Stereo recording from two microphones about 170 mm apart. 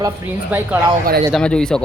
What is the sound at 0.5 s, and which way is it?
Speech, 10° right (ahead or behind).